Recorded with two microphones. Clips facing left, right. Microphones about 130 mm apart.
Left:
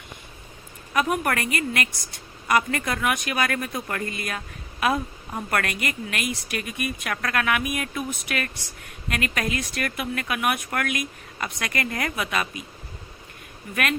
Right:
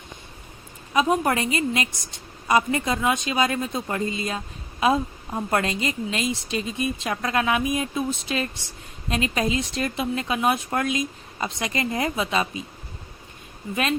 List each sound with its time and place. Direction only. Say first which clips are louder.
0.9 s a woman's voice: right 3 dB; 25° right (ahead or behind)